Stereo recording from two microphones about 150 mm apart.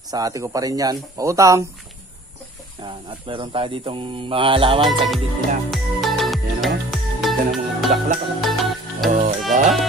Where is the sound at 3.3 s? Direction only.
35° right (ahead or behind).